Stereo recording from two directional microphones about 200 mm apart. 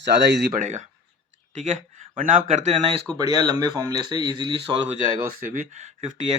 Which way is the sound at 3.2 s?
20° right (ahead or behind).